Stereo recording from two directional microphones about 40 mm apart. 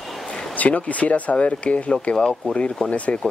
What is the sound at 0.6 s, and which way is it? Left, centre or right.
Speech, left.